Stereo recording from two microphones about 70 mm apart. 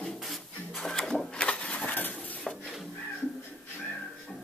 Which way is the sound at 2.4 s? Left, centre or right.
Centre.